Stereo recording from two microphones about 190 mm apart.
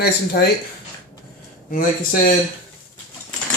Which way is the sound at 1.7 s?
45° left (ahead or behind).